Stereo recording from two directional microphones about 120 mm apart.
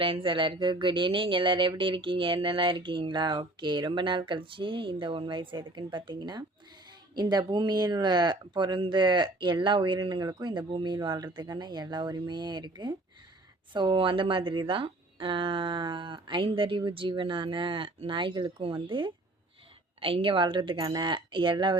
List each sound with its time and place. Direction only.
0.0 s speech: 45° right (ahead or behind)